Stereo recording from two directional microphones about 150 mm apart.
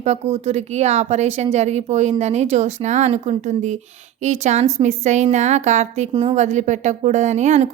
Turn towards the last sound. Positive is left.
turn(degrees=-50)  # may be behind; listen again after turning